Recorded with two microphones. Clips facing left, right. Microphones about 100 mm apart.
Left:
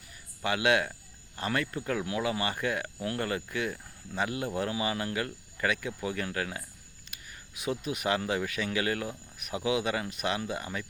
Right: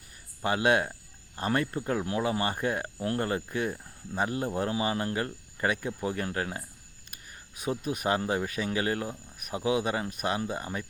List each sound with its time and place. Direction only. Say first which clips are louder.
0.4 s speech: right 2 dB; 40° right (ahead or behind)
7.6 s speech: right 1 dB; 40° right (ahead or behind)